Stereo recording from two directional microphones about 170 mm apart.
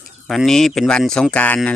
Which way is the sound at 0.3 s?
Centre (ahead or behind).